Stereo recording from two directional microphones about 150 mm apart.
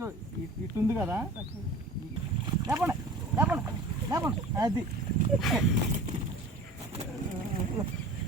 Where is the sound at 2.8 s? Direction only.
10° right (ahead or behind).